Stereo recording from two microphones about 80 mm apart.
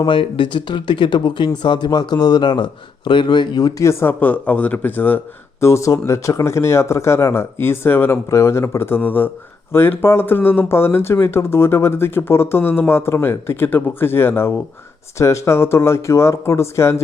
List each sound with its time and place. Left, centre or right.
0.0 s a man's voice: left
3.8 s speech: left
4.2 s speech: centre
5.6 s speech: left